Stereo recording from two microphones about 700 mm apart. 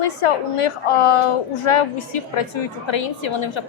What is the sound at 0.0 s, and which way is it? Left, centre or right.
A woman's voice, left.